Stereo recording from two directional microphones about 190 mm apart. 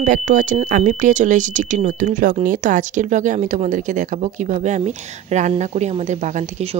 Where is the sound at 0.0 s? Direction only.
45° right (ahead or behind).